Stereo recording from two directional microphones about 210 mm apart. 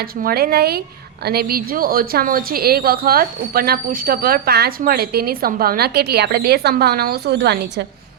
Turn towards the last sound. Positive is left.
turn(degrees=-55)  # may be behind; listen again after turning